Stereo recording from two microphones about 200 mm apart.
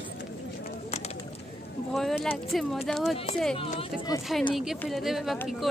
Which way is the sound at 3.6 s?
30° left (ahead or behind).